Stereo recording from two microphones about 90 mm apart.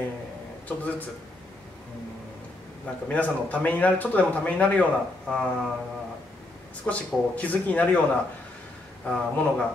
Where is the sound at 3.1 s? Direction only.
15° left (ahead or behind).